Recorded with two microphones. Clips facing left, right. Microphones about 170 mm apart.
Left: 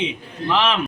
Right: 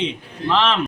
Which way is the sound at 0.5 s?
5° left (ahead or behind).